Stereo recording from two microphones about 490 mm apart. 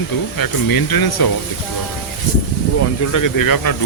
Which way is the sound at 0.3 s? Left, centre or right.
Left.